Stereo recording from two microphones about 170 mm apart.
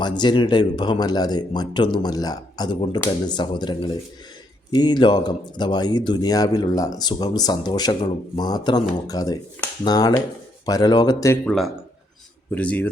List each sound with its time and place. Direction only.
0.0 s speech: 25° left (ahead or behind)
11.4 s speech: centre (ahead or behind)